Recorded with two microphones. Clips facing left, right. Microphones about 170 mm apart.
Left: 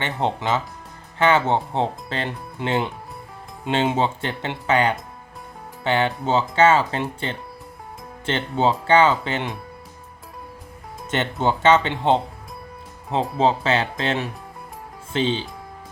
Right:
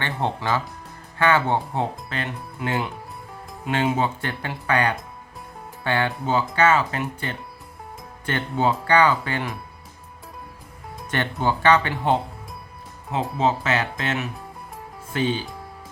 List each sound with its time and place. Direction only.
0.0 s speech: 20° left (ahead or behind)
11.1 s speech: 25° left (ahead or behind)
13.3 s speech: 30° left (ahead or behind)